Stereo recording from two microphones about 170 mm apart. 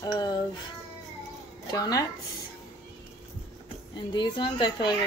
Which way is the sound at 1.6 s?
20° left (ahead or behind).